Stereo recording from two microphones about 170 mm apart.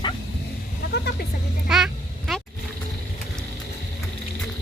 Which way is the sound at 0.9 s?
70° left (ahead or behind).